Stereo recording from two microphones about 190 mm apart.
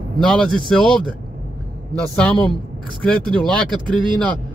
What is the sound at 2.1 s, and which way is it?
Speech, 5° left (ahead or behind).